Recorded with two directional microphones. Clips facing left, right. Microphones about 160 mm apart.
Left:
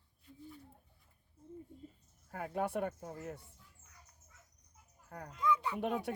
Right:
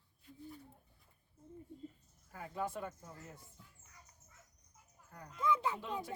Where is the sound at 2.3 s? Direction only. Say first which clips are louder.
Left 5 dB; 65° left (ahead or behind).